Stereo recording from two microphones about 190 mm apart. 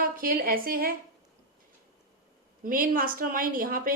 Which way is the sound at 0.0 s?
50° right (ahead or behind).